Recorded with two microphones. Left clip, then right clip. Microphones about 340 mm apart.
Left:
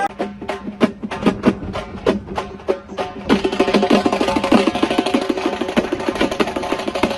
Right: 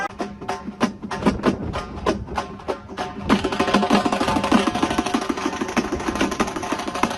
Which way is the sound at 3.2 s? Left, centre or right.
Centre.